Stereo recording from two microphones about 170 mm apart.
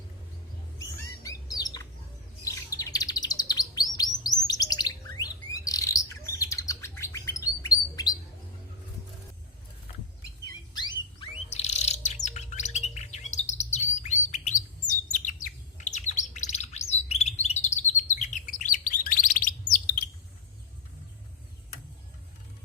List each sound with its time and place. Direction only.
0.8 s bird: 20° left (ahead or behind)
2.7 s chirp: 20° left (ahead or behind)
10.8 s a sound: 25° left (ahead or behind)
11.4 s bird: 40° left (ahead or behind)